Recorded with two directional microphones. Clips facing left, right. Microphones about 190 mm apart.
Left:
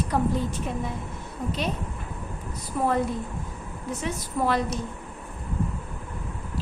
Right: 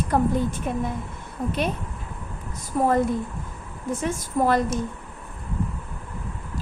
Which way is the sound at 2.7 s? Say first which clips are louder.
Right 4 dB; 45° right (ahead or behind).